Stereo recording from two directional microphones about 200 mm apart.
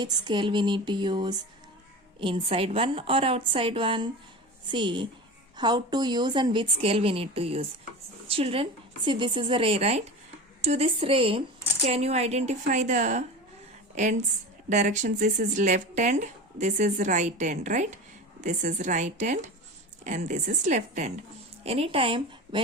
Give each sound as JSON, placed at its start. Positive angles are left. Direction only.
{"t": 0.0, "sound": "a woman's voice", "side_deg": -25}